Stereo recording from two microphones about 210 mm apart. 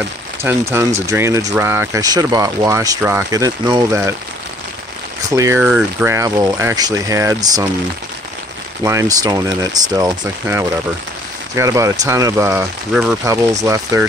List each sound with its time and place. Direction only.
0.4 s speech: 10° right (ahead or behind)
5.3 s speech: 15° right (ahead or behind)
8.8 s speech: 15° right (ahead or behind)